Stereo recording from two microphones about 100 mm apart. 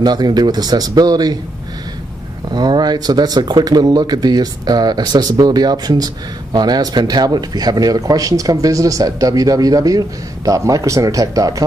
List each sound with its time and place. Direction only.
0.0 s speech: 45° right (ahead or behind)
2.5 s speech: 45° right (ahead or behind)